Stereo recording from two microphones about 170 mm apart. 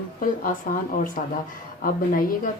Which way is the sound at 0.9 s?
50° left (ahead or behind).